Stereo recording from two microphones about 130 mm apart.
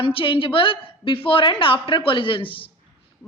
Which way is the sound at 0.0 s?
45° left (ahead or behind).